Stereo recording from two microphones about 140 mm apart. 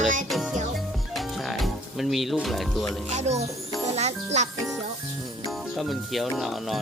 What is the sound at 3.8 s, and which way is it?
Music, 50° right (ahead or behind).